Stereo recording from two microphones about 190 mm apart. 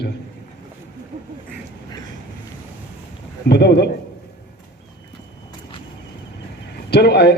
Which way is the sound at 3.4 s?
60° left (ahead or behind).